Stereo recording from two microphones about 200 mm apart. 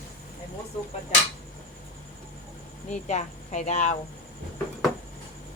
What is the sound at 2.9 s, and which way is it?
Speech, 35° left (ahead or behind).